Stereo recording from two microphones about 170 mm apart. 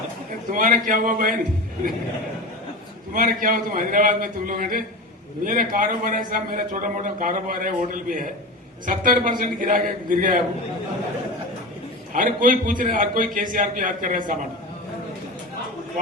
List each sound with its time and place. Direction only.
0.5 s a man's voice: 50° right (ahead or behind)
3.1 s a man's voice: 55° right (ahead or behind)
12.1 s a man's voice: 55° right (ahead or behind)